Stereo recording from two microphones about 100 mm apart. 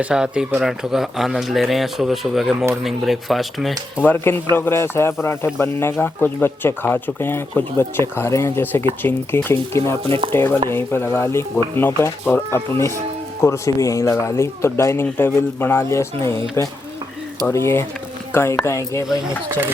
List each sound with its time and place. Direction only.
0.0 s speech: 10° right (ahead or behind)
4.0 s speech: 20° left (ahead or behind)
10.0 s speech: 65° right (ahead or behind)
10.7 s speech: 25° left (ahead or behind)